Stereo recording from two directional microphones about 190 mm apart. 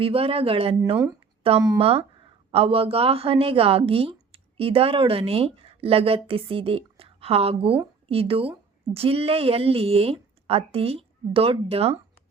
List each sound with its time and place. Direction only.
0.0 s speech: 30° right (ahead or behind)